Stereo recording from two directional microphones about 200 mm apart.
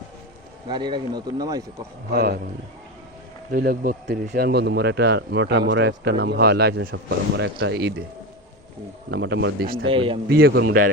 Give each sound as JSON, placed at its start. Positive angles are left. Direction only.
{"t": 0.7, "sound": "speech", "side_deg": -20}
{"t": 2.1, "sound": "a man's voice", "side_deg": -50}
{"t": 3.5, "sound": "speech", "side_deg": -50}
{"t": 9.0, "sound": "speech", "side_deg": -60}
{"t": 9.8, "sound": "speech", "side_deg": -25}
{"t": 10.2, "sound": "speech", "side_deg": -50}